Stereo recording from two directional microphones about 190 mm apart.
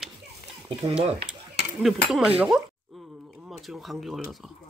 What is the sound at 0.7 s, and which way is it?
Speech, 30° right (ahead or behind).